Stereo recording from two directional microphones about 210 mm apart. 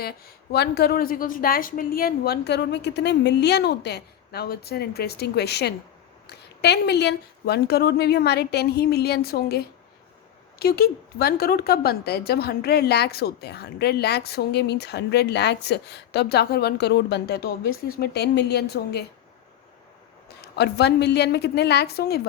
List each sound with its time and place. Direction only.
0.0 s a woman's voice: 45° left (ahead or behind)
20.4 s a woman's voice: 50° left (ahead or behind)